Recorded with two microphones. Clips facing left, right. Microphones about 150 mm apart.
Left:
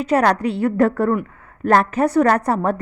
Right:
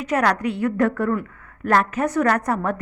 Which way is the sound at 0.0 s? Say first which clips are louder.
Left 4 dB; 30° left (ahead or behind).